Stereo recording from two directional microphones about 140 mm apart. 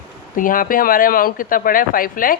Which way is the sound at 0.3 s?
80° left.